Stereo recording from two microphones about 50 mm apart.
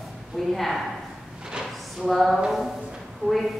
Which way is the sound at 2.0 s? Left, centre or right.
Centre.